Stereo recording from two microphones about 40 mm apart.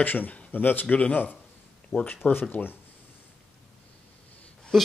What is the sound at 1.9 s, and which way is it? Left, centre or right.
Speech, left.